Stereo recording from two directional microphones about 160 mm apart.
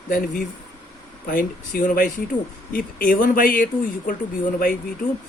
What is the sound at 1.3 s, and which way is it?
Speech, 60° left (ahead or behind).